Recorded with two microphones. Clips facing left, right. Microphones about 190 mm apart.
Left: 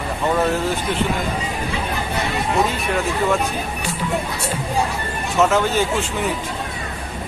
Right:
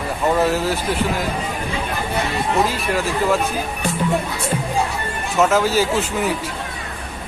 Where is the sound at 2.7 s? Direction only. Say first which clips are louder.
Even; centre (ahead or behind).